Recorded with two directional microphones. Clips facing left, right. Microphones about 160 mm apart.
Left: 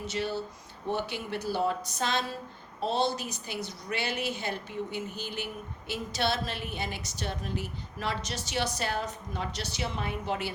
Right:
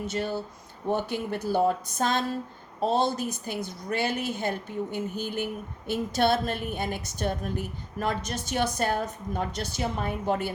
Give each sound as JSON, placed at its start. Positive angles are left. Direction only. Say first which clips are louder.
{"t": 0.0, "sound": "a woman's voice", "louder": "right 2 dB", "side_deg": -50}